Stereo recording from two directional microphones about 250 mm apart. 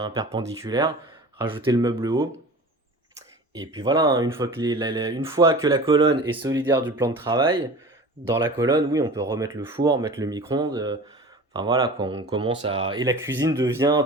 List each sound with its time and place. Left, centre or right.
0.0 s speech: centre
3.5 s speech: centre